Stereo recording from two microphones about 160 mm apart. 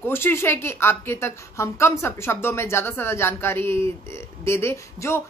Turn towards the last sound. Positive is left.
turn(degrees=15)  # may be behind; listen again after turning